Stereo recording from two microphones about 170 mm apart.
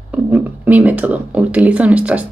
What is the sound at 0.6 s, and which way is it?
Speech, 10° right (ahead or behind).